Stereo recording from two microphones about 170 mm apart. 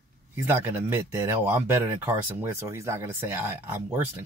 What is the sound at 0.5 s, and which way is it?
Speech, 15° right (ahead or behind).